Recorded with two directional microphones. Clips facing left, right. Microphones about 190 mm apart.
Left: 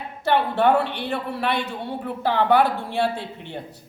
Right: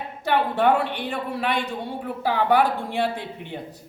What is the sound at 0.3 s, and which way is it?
A man's voice, 15° right (ahead or behind).